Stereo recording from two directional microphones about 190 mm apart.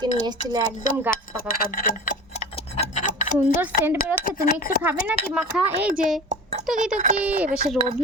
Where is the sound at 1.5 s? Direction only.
50° left (ahead or behind).